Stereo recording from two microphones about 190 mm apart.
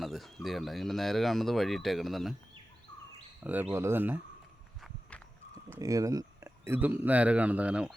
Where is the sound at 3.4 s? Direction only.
10° right (ahead or behind).